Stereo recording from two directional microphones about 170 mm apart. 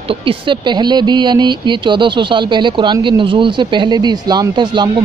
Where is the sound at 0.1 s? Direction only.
30° right (ahead or behind).